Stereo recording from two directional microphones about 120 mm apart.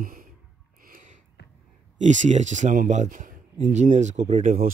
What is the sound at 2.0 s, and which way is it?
Speech, 85° right.